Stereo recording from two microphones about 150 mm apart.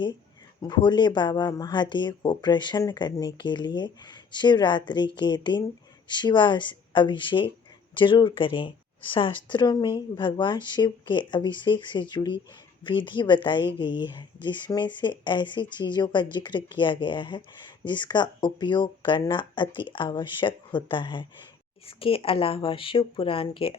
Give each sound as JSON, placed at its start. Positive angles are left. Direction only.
{"t": 0.6, "sound": "speech", "side_deg": 30}